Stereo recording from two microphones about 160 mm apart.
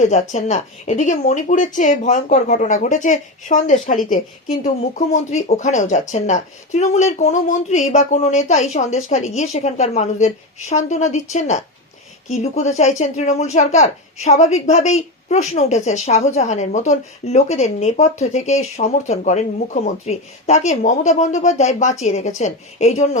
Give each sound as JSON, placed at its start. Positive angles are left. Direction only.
{"t": 0.0, "sound": "a woman's voice", "side_deg": 50}